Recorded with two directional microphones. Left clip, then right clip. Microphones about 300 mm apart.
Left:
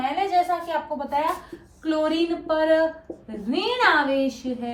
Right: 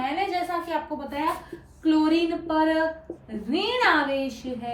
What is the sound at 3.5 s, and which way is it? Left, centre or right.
A woman's voice, centre.